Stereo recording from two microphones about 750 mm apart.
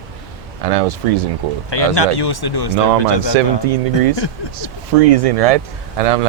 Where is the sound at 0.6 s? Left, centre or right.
Right.